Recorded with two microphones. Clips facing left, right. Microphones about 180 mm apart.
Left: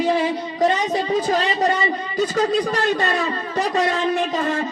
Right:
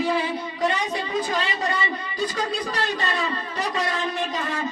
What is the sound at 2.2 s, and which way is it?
Speech, 45° left (ahead or behind).